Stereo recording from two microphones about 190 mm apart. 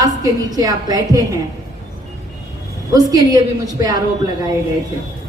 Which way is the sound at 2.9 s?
20° right (ahead or behind).